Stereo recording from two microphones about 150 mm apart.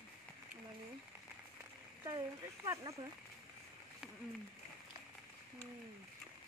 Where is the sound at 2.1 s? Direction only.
20° right (ahead or behind).